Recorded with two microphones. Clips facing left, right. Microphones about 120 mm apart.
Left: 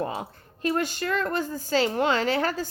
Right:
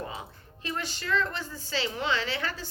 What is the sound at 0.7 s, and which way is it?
A woman's voice, 45° left (ahead or behind).